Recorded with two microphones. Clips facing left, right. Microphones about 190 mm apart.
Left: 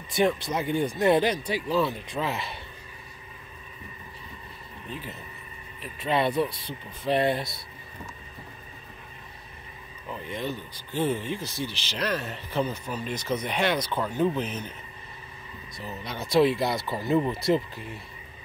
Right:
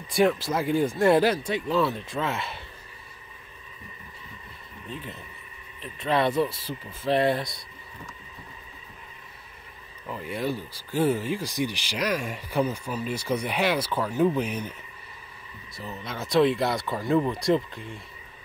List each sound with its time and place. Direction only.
0.1 s speech: centre (ahead or behind)
5.8 s speech: centre (ahead or behind)
10.1 s speech: 5° right (ahead or behind)
15.8 s speech: centre (ahead or behind)